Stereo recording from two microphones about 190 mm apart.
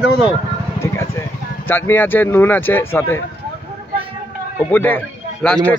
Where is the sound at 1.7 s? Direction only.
10° left (ahead or behind).